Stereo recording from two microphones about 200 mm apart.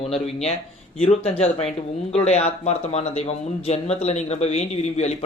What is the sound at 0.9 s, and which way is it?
A man's voice, 30° left (ahead or behind).